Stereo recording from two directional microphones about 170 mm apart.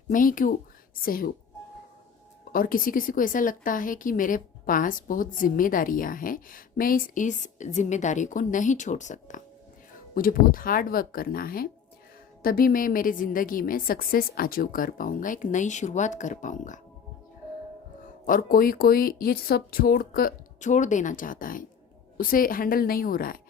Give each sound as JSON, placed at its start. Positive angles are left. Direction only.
{"t": 0.1, "sound": "a woman's voice", "side_deg": 55}
{"t": 2.5, "sound": "a woman's voice", "side_deg": 55}
{"t": 18.0, "sound": "a woman's voice", "side_deg": 55}